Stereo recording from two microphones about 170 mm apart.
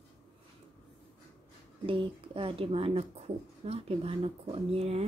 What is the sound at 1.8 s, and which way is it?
Speech, 30° right (ahead or behind).